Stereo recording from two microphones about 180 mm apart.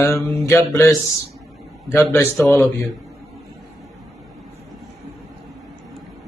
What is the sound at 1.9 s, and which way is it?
Speech, 15° left (ahead or behind).